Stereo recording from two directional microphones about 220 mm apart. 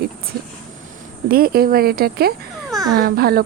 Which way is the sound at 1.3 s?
40° right (ahead or behind).